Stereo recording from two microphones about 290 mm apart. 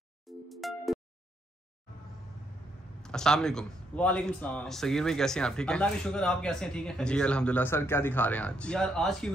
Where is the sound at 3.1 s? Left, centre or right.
Centre.